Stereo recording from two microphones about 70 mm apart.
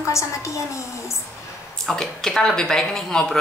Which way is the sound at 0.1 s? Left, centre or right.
Left.